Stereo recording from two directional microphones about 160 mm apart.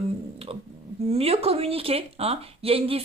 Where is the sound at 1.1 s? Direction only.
40° right (ahead or behind).